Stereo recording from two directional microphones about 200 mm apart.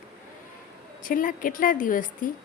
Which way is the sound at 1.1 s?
45° left (ahead or behind).